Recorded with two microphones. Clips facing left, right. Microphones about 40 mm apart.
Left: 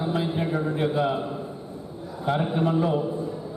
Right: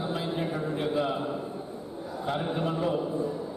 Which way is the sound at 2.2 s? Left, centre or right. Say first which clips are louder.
Left 6 dB; centre.